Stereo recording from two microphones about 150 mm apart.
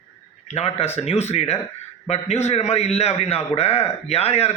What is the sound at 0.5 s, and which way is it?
A man's voice, 45° left (ahead or behind).